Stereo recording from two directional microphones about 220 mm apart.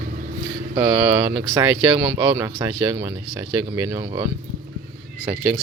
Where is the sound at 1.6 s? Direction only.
20° right (ahead or behind).